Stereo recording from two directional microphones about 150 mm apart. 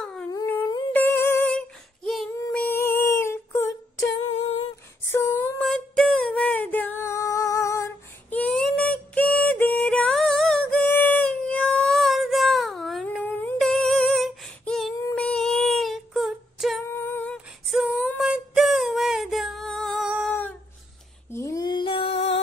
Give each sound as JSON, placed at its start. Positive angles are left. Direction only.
{"t": 0.0, "sound": "dog", "side_deg": 5}
{"t": 0.7, "sound": "humming", "side_deg": 30}
{"t": 0.9, "sound": "music", "side_deg": 15}
{"t": 2.5, "sound": "female singing", "side_deg": 15}
{"t": 5.1, "sound": "female singing", "side_deg": 10}
{"t": 13.2, "sound": "humming", "side_deg": 15}
{"t": 13.6, "sound": "humming", "side_deg": 0}
{"t": 15.1, "sound": "female singing", "side_deg": 5}
{"t": 16.9, "sound": "female singing", "side_deg": 15}
{"t": 17.6, "sound": "female singing", "side_deg": 0}
{"t": 20.2, "sound": "humming", "side_deg": 10}
{"t": 21.3, "sound": "female singing", "side_deg": 20}